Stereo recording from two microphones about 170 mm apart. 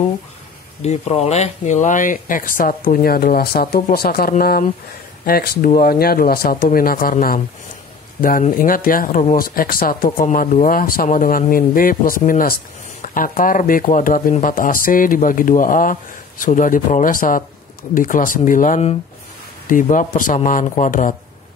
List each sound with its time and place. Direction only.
0.8 s speech: 40° left (ahead or behind)